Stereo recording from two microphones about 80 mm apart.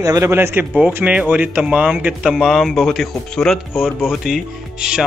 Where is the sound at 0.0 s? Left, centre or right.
Right.